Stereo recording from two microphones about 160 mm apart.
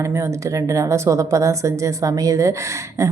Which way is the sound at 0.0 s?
20° right (ahead or behind).